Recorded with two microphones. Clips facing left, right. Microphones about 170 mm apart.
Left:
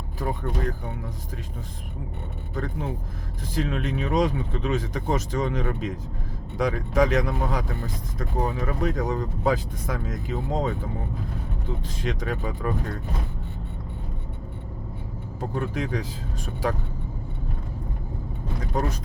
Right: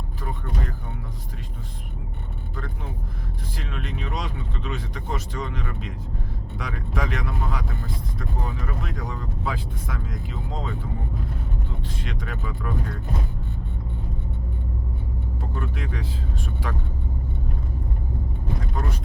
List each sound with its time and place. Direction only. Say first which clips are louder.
3.5 s speech: left 9 dB; 45° left (ahead or behind)
12.0 s speech: left 7 dB; 40° left (ahead or behind)
15.4 s speech: left 6 dB; 45° left (ahead or behind)
18.7 s speech: left 8 dB; 40° left (ahead or behind)